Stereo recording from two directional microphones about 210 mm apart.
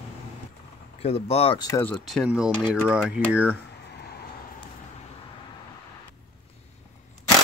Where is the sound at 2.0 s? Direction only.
Centre (ahead or behind).